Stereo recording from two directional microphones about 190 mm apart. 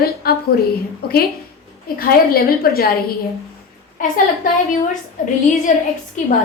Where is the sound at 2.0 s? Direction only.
50° left (ahead or behind).